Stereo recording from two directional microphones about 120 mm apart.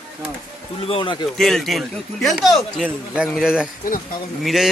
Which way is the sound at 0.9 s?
45° left (ahead or behind).